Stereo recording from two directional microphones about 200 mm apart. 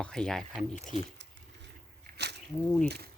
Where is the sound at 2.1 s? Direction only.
55° right (ahead or behind).